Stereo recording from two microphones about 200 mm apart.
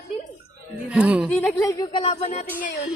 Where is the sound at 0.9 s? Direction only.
5° right (ahead or behind).